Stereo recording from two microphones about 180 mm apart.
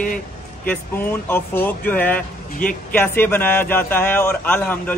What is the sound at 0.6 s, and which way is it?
Speech, 10° left (ahead or behind).